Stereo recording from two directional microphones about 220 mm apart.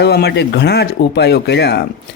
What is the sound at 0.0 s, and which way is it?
Speech, 50° left (ahead or behind).